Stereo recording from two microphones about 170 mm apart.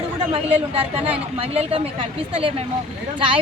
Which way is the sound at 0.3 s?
35° right (ahead or behind).